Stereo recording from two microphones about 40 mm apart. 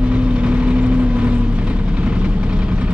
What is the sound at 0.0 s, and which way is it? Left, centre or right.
Vehicle, right.